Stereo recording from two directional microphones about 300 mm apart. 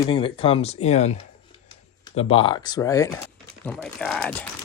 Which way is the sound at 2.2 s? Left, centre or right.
Centre.